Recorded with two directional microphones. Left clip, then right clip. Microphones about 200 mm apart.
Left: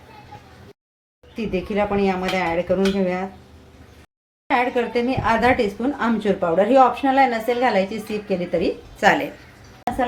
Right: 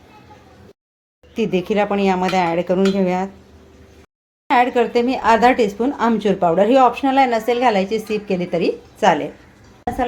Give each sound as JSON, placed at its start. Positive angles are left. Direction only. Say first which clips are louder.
{"t": 1.4, "sound": "speech", "louder": "right 4 dB", "side_deg": -40}
{"t": 4.4, "sound": "speech", "louder": "right 5 dB", "side_deg": -35}